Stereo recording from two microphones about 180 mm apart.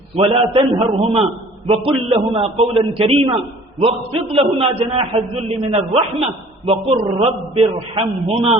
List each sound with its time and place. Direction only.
0.2 s a man's voice: 30° right (ahead or behind)